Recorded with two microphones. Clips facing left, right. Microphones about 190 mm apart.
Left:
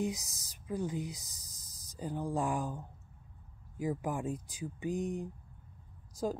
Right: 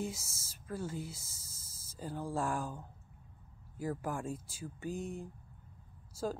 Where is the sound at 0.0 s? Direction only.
15° left (ahead or behind).